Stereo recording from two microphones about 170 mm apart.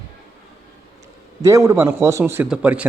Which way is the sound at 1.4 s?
15° right (ahead or behind).